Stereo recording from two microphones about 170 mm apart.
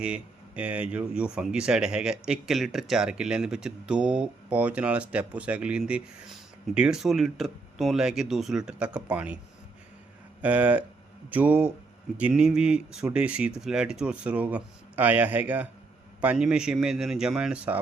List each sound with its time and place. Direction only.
0.0 s speech: 5° right (ahead or behind)
10.4 s speech: 10° right (ahead or behind)